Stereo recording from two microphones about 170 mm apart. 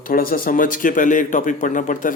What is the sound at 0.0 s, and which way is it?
Speech, 55° left (ahead or behind).